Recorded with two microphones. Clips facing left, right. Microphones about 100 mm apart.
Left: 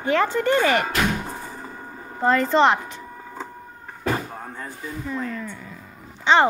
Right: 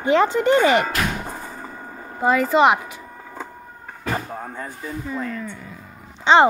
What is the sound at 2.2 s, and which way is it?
Speech, 5° right (ahead or behind).